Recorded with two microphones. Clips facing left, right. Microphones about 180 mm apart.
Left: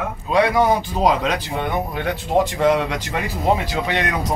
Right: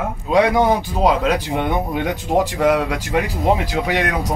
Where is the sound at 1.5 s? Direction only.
15° right (ahead or behind).